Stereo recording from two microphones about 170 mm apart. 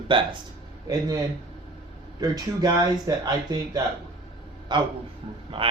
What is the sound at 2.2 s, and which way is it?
A man's voice, 20° right (ahead or behind).